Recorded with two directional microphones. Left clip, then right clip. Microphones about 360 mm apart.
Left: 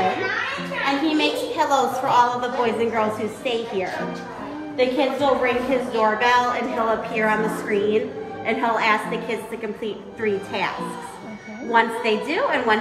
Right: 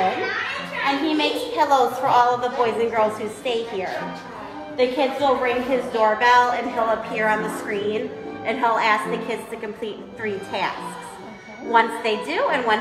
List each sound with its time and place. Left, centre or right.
0.8 s a woman's voice: right
11.7 s a woman's voice: right